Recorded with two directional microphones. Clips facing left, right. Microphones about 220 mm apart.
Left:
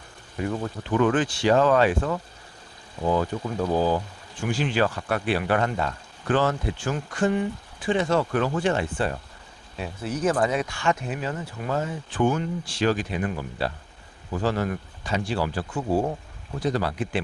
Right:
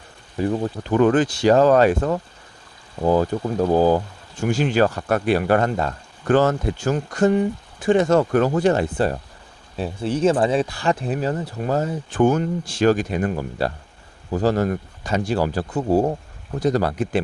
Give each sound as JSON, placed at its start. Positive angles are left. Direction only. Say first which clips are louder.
{"t": 0.3, "sound": "speech", "louder": "right 6 dB", "side_deg": -35}